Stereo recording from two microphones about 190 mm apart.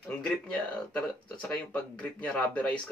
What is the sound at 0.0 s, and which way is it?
Speech, 5° left (ahead or behind).